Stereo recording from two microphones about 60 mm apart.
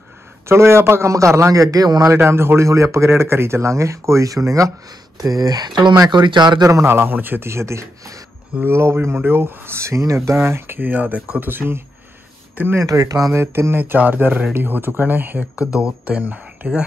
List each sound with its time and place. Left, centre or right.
0.5 s speech: right
1.5 s a man's voice: right
2.1 s speech: right
5.2 s speech: right
6.8 s speech: right
7.4 s speech: right
11.3 s speech: right
12.8 s a man's voice: right
13.3 s speech: right
15.8 s speech: centre